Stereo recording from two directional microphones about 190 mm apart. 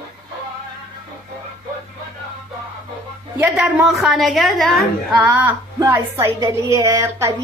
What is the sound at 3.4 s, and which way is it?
A woman's voice, 5° right (ahead or behind).